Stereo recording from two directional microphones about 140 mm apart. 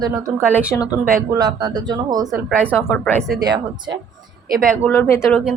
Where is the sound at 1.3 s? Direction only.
30° right (ahead or behind).